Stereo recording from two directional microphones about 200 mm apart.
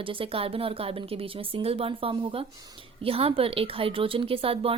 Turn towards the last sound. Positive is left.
turn(degrees=-30)  # may be behind; listen again after turning